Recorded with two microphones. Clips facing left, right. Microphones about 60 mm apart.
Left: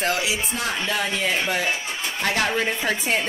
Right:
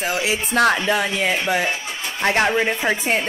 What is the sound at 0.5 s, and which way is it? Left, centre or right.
Speech, right.